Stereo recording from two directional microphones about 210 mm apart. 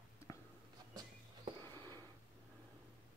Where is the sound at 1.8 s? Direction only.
20° right (ahead or behind).